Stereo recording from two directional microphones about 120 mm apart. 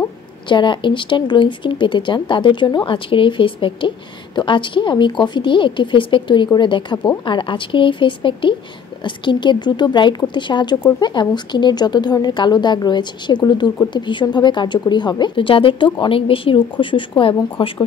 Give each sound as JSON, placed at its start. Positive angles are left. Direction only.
{"t": 0.5, "sound": "a woman's voice", "side_deg": 40}